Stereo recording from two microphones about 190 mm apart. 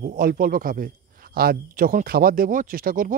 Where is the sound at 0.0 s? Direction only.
45° right (ahead or behind).